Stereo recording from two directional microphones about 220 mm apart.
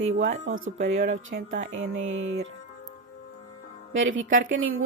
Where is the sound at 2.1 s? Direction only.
60° right (ahead or behind).